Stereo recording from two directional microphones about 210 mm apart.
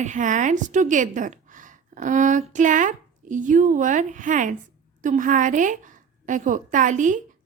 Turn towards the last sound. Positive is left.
turn(degrees=-35)  # may be behind; listen again after turning